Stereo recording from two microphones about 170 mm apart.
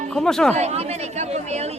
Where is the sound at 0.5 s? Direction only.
40° right (ahead or behind).